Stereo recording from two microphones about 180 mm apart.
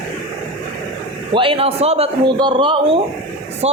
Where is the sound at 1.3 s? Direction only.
30° right (ahead or behind).